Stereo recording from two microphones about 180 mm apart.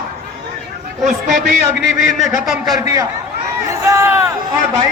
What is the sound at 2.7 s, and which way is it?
Speech, 20° right (ahead or behind).